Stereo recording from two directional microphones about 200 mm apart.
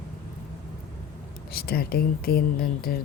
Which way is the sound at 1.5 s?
50° left (ahead or behind).